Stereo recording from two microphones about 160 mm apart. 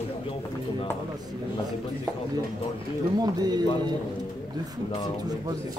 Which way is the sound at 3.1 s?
25° right (ahead or behind).